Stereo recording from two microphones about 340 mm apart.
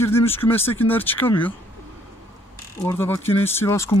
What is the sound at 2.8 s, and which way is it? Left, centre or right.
Speech, centre.